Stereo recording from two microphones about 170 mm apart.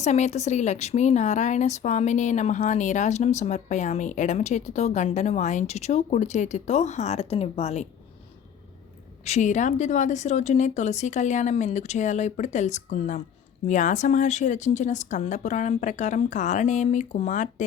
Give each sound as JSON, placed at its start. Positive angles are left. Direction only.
{"t": 0.0, "sound": "a woman's voice", "side_deg": 40}
{"t": 9.2, "sound": "a woman's voice", "side_deg": 45}